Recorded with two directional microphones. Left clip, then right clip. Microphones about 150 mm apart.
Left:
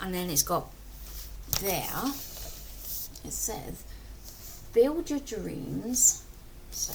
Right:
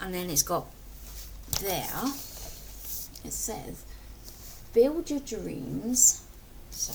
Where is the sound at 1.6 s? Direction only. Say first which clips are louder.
Left 1 dB; 5° right (ahead or behind).